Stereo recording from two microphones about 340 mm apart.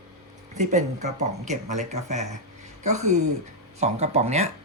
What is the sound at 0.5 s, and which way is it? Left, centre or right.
Speech, right.